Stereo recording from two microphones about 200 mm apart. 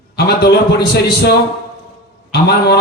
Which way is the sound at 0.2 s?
55° left (ahead or behind).